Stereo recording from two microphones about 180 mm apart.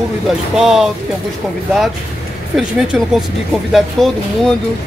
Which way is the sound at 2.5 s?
Centre (ahead or behind).